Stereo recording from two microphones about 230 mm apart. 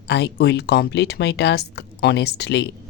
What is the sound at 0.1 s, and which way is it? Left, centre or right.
Speech, left.